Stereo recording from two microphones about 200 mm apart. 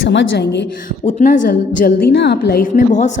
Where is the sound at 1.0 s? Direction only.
35° left (ahead or behind).